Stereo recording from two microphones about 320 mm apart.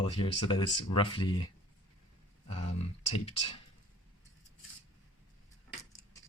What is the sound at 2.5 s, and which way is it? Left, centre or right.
Speech, left.